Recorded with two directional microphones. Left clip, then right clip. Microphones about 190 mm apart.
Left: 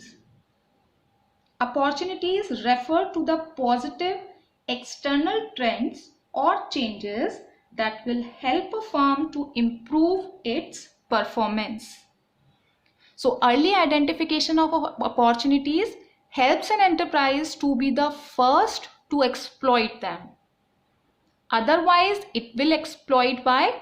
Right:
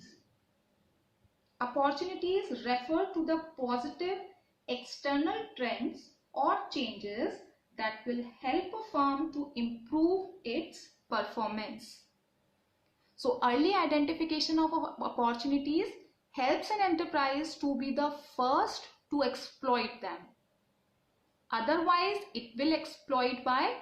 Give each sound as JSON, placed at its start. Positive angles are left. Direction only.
{"t": 1.5, "sound": "a woman's voice", "side_deg": 50}
{"t": 13.1, "sound": "a woman's voice", "side_deg": 50}
{"t": 21.4, "sound": "a woman's voice", "side_deg": 50}